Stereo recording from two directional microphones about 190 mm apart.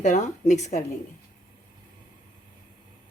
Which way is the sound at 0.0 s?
40° left (ahead or behind).